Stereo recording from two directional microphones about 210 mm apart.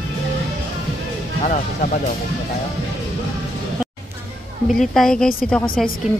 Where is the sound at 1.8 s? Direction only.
40° left (ahead or behind).